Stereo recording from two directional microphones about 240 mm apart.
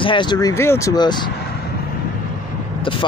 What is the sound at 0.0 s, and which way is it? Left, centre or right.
Speech, centre.